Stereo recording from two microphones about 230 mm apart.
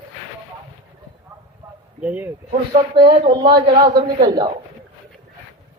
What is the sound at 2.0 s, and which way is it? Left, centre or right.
Speech, centre.